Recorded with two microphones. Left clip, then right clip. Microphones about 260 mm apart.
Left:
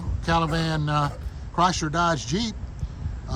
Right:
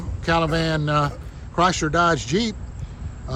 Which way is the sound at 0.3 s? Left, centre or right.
Centre.